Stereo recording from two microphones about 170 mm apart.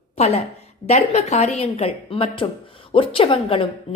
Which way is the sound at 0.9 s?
40° left (ahead or behind).